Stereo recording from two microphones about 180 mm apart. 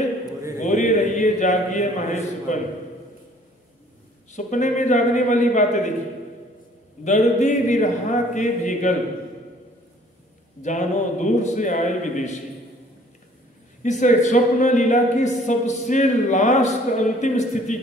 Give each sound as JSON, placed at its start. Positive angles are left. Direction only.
{"t": 0.6, "sound": "a man's voice", "side_deg": 40}
{"t": 4.3, "sound": "speech", "side_deg": 40}
{"t": 7.1, "sound": "a man's voice", "side_deg": 40}
{"t": 10.6, "sound": "speech", "side_deg": 45}
{"t": 13.8, "sound": "speech", "side_deg": 40}